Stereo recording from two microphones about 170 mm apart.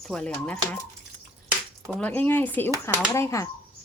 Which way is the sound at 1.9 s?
10° left (ahead or behind).